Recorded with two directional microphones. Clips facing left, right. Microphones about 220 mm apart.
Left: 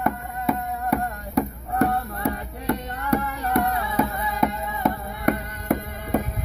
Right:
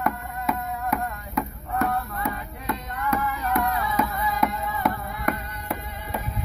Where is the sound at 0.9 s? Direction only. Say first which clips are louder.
Left 7 dB; 35° left (ahead or behind).